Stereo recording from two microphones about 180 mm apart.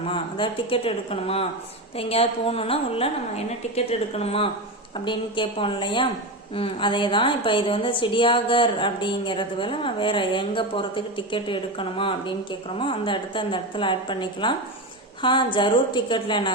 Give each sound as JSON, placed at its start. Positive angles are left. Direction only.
{"t": 0.0, "sound": "a woman's voice", "side_deg": 30}